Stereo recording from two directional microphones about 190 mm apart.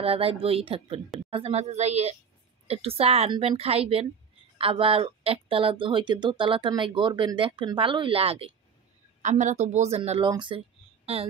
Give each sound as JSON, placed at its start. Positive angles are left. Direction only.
{"t": 0.0, "sound": "a woman's voice", "side_deg": -30}